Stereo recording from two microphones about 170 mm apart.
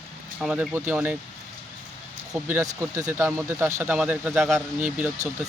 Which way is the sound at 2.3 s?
15° right (ahead or behind).